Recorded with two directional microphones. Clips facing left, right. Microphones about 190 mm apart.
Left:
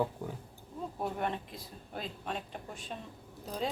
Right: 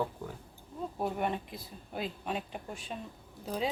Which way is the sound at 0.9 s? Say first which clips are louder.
Right 2 dB; 10° right (ahead or behind).